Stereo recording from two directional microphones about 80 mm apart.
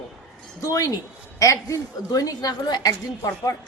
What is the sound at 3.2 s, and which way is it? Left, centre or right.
Speech, left.